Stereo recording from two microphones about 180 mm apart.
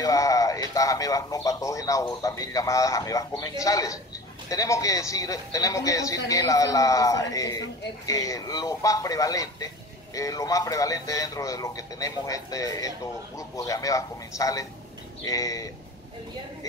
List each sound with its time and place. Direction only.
0.0 s speech: 20° left (ahead or behind)